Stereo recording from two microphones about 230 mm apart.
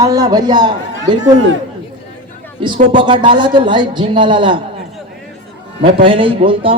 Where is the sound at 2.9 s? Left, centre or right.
Right.